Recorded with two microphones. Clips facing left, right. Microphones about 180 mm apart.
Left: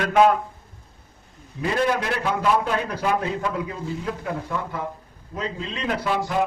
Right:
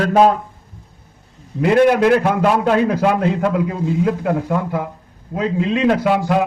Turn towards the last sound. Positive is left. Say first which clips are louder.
# right 9 dB
turn(degrees=-75)  # may be behind; listen again after turning